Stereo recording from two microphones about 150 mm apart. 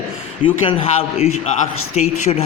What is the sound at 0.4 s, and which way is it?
Speech, 40° left (ahead or behind).